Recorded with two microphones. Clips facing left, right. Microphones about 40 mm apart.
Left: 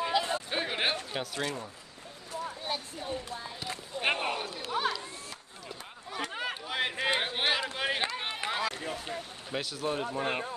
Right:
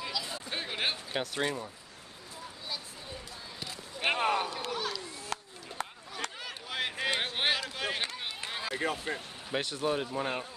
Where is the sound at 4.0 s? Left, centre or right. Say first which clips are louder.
Right 2 dB; centre.